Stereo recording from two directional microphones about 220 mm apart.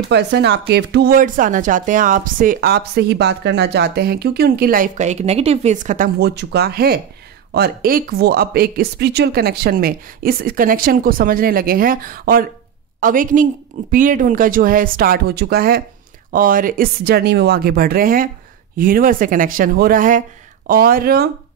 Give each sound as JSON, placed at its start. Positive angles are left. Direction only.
{"t": 0.1, "sound": "speech", "side_deg": -50}